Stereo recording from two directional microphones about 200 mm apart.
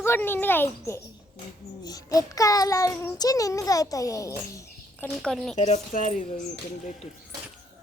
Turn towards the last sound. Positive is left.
turn(degrees=40)  # may be behind; listen again after turning